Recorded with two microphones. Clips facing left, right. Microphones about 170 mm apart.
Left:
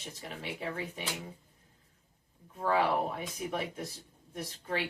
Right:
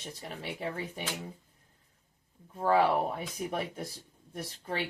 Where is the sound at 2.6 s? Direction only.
40° right (ahead or behind).